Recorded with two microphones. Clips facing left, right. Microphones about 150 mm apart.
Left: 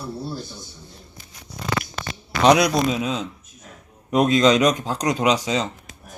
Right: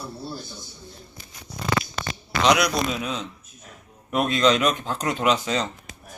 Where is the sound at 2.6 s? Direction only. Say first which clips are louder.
Left 4 dB; 25° left (ahead or behind).